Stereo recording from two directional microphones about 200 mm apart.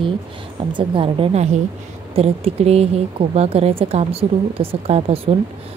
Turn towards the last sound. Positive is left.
turn(degrees=-30)  # may be behind; listen again after turning